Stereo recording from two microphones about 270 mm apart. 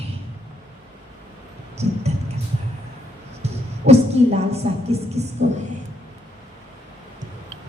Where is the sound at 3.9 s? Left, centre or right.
Right.